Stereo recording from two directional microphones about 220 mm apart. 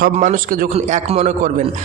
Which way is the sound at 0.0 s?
35° right (ahead or behind).